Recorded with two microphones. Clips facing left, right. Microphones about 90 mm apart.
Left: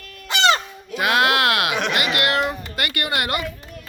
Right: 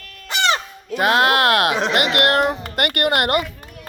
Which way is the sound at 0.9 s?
35° right (ahead or behind).